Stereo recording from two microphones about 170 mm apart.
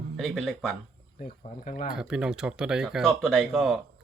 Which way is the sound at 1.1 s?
50° left (ahead or behind).